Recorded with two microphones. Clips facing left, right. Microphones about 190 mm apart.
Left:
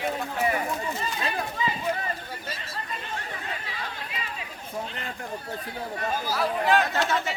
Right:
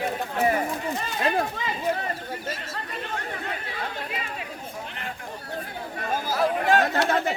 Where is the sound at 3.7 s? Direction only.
50° right (ahead or behind).